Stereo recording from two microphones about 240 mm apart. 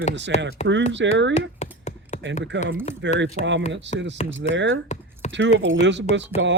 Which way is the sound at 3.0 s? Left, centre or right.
Right.